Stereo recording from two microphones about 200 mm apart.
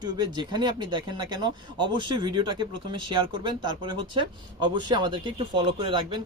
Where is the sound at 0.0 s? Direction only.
20° right (ahead or behind).